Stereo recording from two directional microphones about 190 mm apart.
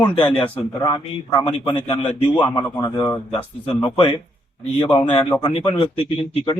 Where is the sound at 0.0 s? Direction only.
25° left (ahead or behind).